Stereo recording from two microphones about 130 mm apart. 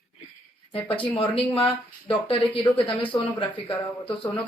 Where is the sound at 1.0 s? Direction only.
45° left (ahead or behind).